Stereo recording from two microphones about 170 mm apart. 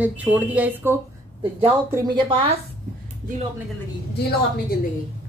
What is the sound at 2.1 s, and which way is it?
Speech, 30° right (ahead or behind).